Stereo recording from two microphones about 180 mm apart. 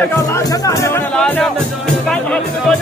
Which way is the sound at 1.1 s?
5° left (ahead or behind).